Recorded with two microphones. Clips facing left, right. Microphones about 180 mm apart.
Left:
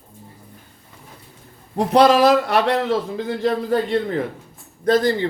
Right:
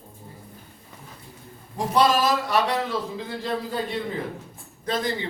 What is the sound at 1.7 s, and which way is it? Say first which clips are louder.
A man's voice: left 7 dB; 70° left (ahead or behind).